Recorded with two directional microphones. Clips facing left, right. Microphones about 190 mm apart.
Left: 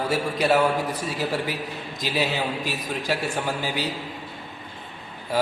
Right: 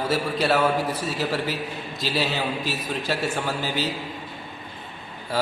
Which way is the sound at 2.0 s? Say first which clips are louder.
Even; 15° left (ahead or behind).